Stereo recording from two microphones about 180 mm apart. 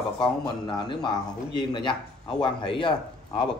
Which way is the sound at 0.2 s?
25° left (ahead or behind).